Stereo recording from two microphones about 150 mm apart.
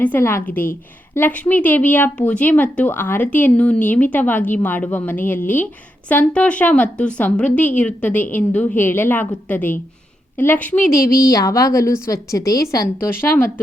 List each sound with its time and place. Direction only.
0.0 s a woman's voice: 15° left (ahead or behind)